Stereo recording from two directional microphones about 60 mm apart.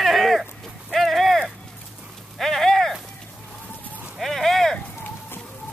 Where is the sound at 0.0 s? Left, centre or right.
Centre.